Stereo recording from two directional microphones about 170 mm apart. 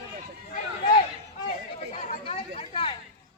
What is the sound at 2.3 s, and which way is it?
Chatter, 30° left (ahead or behind).